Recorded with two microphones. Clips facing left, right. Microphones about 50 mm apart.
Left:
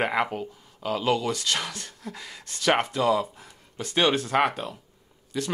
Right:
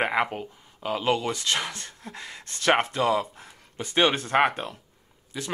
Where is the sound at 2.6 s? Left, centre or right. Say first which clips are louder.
Even; right.